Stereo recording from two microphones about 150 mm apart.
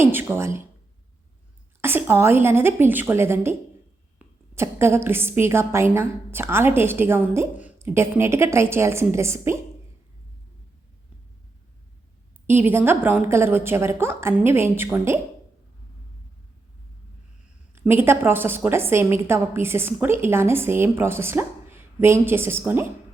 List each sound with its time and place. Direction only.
0.0 s a woman's voice: 15° right (ahead or behind)
1.8 s a woman's voice: 15° right (ahead or behind)
4.2 s a sound: 10° right (ahead or behind)
4.5 s a woman's voice: 15° right (ahead or behind)
12.5 s a woman's voice: 15° right (ahead or behind)
17.8 s a woman's voice: 15° right (ahead or behind)